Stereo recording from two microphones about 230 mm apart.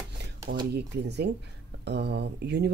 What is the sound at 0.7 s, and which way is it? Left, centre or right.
Speech, right.